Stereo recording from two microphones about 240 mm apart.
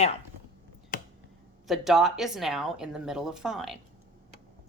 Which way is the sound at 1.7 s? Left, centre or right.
Centre.